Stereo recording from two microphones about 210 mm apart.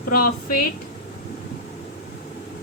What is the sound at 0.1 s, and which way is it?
Speech, 40° left (ahead or behind).